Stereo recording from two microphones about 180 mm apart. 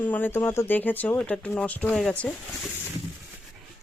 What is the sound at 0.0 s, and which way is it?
Speech, 10° left (ahead or behind).